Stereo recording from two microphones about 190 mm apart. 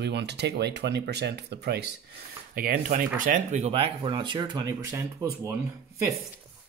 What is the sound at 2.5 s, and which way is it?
Speech, 50° right (ahead or behind).